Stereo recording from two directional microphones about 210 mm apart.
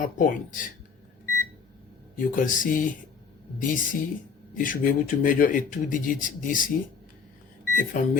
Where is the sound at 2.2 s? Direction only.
40° left (ahead or behind).